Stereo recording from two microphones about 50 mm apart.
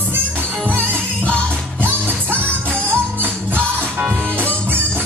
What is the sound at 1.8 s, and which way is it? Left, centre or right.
Music, right.